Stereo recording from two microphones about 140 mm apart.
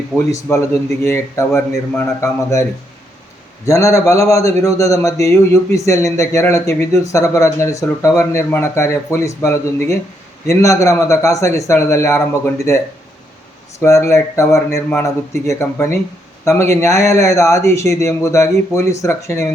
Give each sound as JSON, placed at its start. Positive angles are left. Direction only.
{"t": 0.5, "sound": "a man's voice", "side_deg": 20}
{"t": 3.7, "sound": "a man's voice", "side_deg": 20}